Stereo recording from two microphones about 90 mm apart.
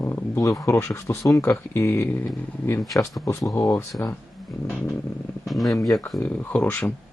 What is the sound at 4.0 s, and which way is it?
Speech, 20° left (ahead or behind).